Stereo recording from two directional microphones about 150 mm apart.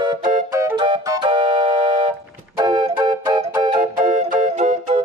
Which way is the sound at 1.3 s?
35° right (ahead or behind).